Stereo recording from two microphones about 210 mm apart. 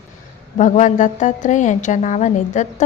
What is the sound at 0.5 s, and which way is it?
A woman's voice, 35° left (ahead or behind).